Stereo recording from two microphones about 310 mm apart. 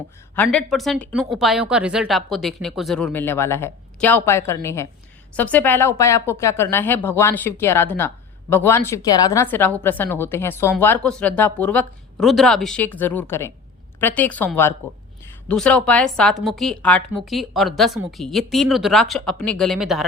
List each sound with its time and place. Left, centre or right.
0.3 s speech: centre